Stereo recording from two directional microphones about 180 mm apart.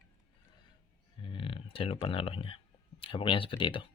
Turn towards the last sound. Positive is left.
turn(degrees=25)  # may be behind; listen again after turning